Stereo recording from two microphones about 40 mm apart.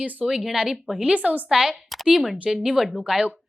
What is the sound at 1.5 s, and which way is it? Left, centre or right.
Speech, centre.